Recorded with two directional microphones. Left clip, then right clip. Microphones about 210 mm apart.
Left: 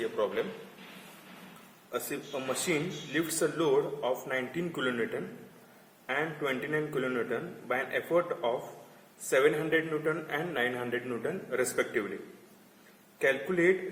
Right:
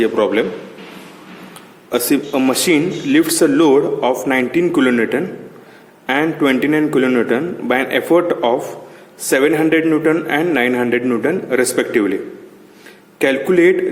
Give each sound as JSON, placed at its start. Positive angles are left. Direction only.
{"t": 1.9, "sound": "speech", "side_deg": -40}
{"t": 6.1, "sound": "speech", "side_deg": -40}
{"t": 13.1, "sound": "speech", "side_deg": -40}